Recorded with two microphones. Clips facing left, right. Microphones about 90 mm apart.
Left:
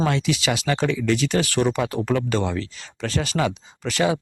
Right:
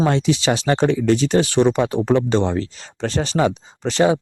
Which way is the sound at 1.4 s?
20° right (ahead or behind).